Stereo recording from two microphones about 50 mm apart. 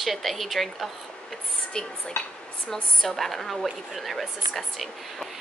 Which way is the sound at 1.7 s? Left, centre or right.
Centre.